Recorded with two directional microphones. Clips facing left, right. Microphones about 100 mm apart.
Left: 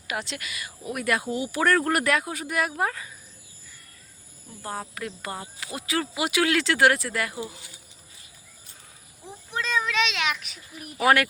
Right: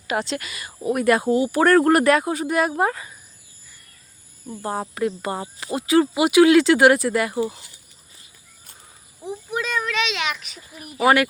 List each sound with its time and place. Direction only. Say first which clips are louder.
0.1 s speech: right 7 dB; 35° right (ahead or behind)
4.4 s speech: right 7 dB; 25° right (ahead or behind)
9.2 s a child's voice: right 5 dB; 10° right (ahead or behind)